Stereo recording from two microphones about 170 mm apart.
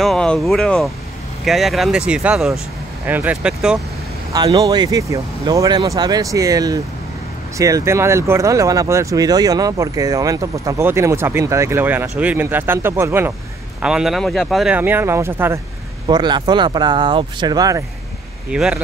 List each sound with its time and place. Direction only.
0.0 s speech: 5° left (ahead or behind)
4.3 s speech: 25° right (ahead or behind)
16.1 s speech: 25° right (ahead or behind)
18.5 s speech: 5° right (ahead or behind)